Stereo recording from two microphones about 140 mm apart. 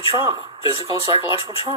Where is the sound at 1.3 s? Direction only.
40° left (ahead or behind).